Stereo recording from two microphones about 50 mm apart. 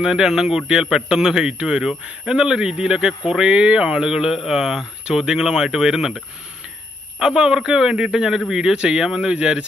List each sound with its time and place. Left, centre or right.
0.0 s speech: centre